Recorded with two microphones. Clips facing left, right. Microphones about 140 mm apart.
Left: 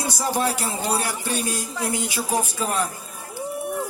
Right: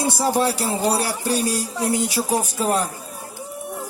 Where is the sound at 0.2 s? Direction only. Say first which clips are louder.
Right 2 dB; 35° right (ahead or behind).